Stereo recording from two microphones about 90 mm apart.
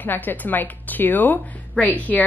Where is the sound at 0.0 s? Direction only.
20° left (ahead or behind).